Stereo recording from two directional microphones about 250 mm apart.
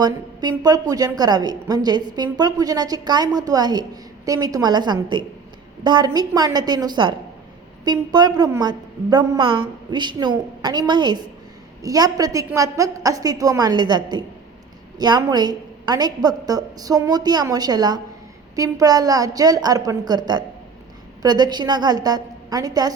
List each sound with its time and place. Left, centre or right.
0.0 s a woman's voice: centre